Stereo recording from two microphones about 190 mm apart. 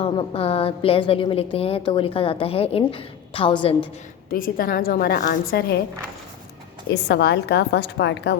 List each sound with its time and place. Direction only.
0.0 s a woman's voice: 30° left (ahead or behind)
4.3 s a woman's voice: 50° left (ahead or behind)
6.9 s a woman's voice: 60° left (ahead or behind)